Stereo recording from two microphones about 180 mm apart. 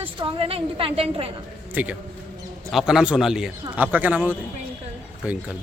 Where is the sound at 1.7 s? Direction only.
10° right (ahead or behind).